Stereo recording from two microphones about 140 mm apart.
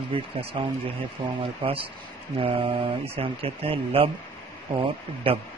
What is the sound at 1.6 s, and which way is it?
Speech, 40° right (ahead or behind).